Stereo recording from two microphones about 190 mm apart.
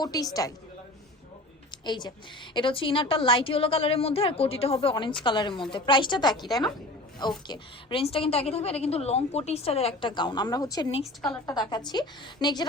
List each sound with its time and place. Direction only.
0.0 s a woman's voice: 20° left (ahead or behind)
1.8 s a woman's voice: 25° left (ahead or behind)
7.4 s a woman's voice: 25° left (ahead or behind)